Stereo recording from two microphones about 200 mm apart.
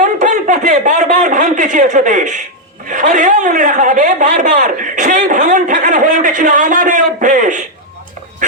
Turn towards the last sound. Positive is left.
turn(degrees=-40)  # may be behind; listen again after turning